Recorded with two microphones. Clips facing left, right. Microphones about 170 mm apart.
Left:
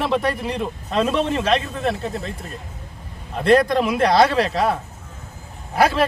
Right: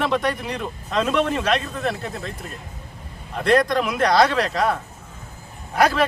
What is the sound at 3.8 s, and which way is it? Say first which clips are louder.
Speech: left 2 dB; 30° left (ahead or behind).